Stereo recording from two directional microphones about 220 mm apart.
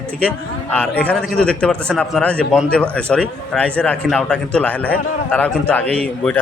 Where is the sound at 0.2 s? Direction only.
5° left (ahead or behind).